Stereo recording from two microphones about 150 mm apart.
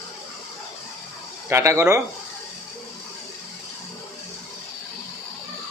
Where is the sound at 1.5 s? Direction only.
20° right (ahead or behind).